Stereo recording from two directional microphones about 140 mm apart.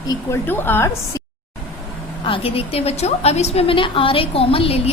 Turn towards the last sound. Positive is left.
turn(degrees=45)  # may be behind; listen again after turning